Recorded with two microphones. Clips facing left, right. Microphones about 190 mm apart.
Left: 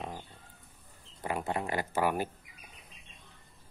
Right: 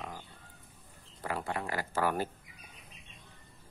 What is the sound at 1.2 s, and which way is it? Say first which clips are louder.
Speech: left 2 dB; 20° left (ahead or behind).